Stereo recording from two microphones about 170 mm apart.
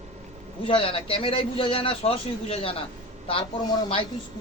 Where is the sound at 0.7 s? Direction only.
30° left (ahead or behind).